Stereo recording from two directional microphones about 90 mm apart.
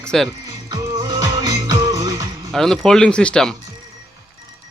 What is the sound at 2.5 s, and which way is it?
Speech, 5° left (ahead or behind).